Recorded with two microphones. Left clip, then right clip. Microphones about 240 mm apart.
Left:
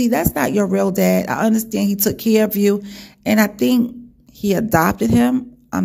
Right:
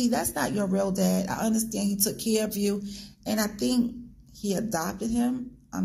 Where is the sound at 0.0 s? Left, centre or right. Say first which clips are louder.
Left 9 dB; left.